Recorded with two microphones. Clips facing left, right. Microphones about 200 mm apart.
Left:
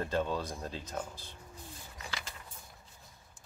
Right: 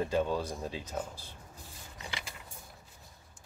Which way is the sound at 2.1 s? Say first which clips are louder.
Right 1 dB; 15° right (ahead or behind).